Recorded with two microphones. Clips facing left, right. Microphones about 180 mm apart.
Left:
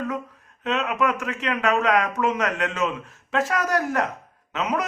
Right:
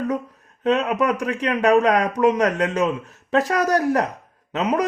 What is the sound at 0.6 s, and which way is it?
Speech, 35° right (ahead or behind).